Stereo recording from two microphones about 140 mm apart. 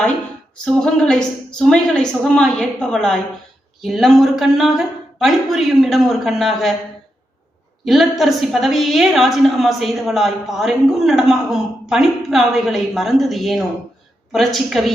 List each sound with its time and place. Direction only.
0.6 s a woman's voice: 5° left (ahead or behind)
7.9 s a woman's voice: centre (ahead or behind)